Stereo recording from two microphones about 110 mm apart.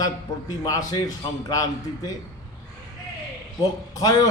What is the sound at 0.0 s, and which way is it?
A man's voice, 35° left (ahead or behind).